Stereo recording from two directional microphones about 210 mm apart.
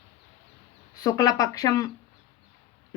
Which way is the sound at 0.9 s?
20° left (ahead or behind).